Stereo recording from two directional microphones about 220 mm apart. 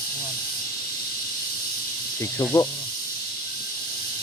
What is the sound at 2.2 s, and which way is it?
Speech, 15° left (ahead or behind).